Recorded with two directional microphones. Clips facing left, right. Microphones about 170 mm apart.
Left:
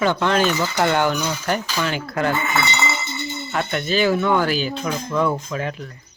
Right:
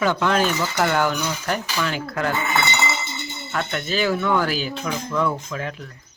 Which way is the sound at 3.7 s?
Centre (ahead or behind).